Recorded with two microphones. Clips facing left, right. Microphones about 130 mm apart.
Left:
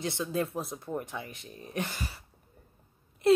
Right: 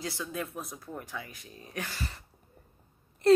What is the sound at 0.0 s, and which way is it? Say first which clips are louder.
Speech: left 5 dB; 25° left (ahead or behind).